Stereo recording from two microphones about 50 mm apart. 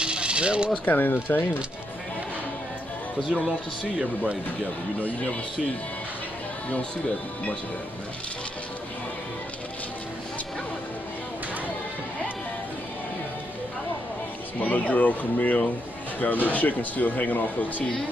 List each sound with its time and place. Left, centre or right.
0.0 s coin: centre
0.8 s speech: left
4.0 s speech: centre
14.6 s speech: left